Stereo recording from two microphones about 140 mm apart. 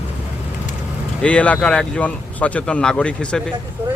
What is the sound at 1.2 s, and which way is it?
Speech, 10° left (ahead or behind).